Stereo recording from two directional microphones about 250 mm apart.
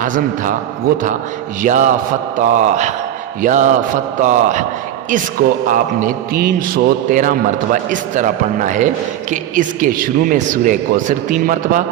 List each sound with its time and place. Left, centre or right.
1.6 s a man's voice: right